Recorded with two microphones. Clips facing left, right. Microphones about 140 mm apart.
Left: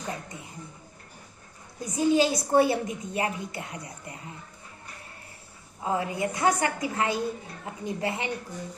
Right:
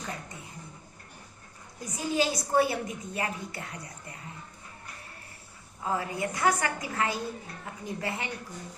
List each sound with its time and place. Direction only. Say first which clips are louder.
1.8 s a woman's voice: left 6 dB; 25° left (ahead or behind)
5.8 s a woman's voice: left 3 dB; 20° left (ahead or behind)